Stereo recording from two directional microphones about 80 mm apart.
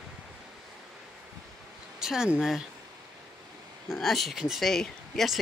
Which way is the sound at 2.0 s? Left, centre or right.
Centre.